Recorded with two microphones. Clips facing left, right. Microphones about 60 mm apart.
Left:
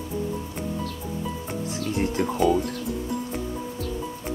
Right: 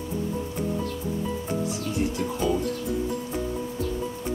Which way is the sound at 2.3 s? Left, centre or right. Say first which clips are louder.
Left 6 dB; centre.